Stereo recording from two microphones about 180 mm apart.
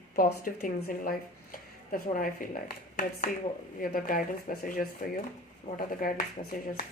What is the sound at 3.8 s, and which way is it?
A woman's voice, 50° left (ahead or behind).